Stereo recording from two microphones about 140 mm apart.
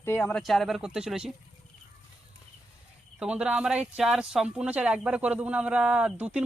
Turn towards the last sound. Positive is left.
turn(degrees=-10)  # may be behind; listen again after turning